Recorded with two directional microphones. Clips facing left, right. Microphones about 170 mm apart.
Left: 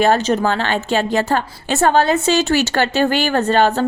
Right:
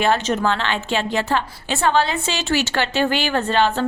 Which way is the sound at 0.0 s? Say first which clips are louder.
Left 4 dB; 40° left (ahead or behind).